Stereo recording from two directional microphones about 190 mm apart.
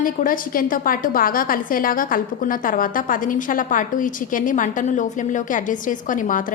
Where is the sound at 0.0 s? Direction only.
45° left (ahead or behind).